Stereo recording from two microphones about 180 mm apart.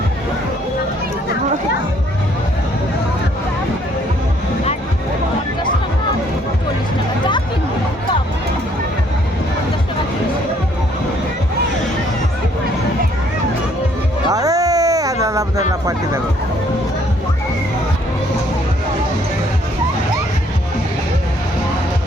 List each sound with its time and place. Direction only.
14.3 s music: 20° right (ahead or behind)